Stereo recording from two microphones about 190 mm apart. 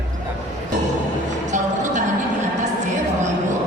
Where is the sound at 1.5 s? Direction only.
40° right (ahead or behind).